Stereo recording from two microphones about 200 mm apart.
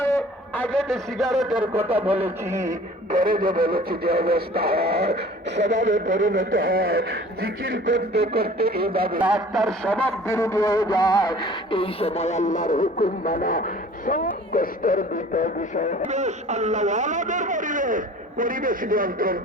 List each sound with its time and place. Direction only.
0.0 s a man's voice: 10° left (ahead or behind); by 2.1 s 10° right (ahead or behind)
3.1 s synthetic singing: 45° right (ahead or behind); by 6.6 s 70° right (ahead or behind)
6.6 s synthetic singing: 45° right (ahead or behind)
7.9 s synthetic singing: 60° right (ahead or behind)
9.2 s speech: 5° right (ahead or behind); by 16.0 s 40° left (ahead or behind)
16.0 s speech: 35° right (ahead or behind)